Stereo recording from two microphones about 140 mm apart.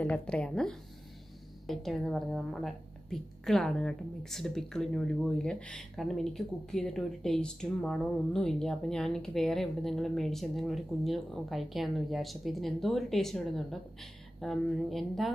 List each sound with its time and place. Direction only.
0.0 s a woman's voice: 5° left (ahead or behind)